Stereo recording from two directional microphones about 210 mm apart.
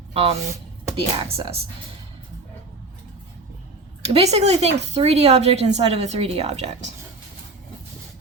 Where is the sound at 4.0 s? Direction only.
30° right (ahead or behind).